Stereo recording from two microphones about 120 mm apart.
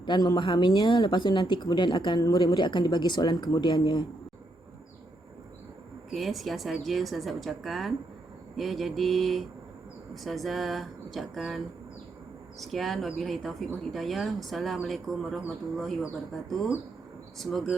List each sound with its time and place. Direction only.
0.0 s speech: 35° left (ahead or behind)
6.1 s speech: centre (ahead or behind)